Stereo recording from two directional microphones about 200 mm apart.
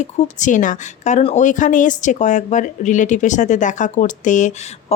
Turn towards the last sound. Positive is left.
turn(degrees=40)  # may be behind; listen again after turning